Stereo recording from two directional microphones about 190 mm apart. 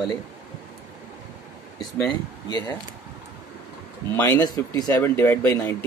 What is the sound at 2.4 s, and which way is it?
Speech, 20° left (ahead or behind).